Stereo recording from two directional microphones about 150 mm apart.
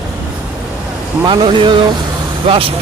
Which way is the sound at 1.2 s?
35° right (ahead or behind).